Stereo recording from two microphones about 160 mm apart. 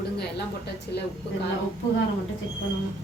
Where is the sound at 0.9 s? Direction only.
90° left.